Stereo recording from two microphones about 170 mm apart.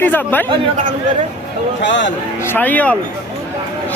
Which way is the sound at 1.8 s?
90° left.